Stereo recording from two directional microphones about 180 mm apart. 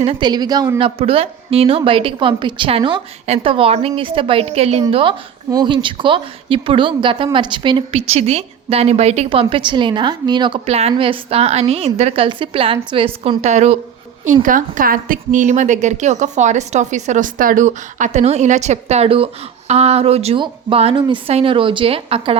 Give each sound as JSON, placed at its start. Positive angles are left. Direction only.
{"t": 0.0, "sound": "a woman's voice", "side_deg": -30}
{"t": 14.4, "sound": "a woman's voice", "side_deg": -50}